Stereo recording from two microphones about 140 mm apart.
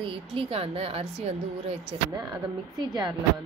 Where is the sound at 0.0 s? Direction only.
40° right (ahead or behind).